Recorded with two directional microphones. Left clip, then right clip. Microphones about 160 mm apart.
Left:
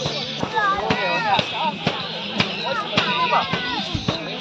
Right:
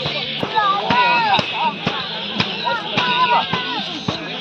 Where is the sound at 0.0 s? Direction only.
55° left (ahead or behind).